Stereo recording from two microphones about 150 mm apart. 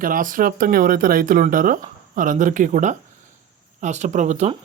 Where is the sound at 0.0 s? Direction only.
65° right (ahead or behind).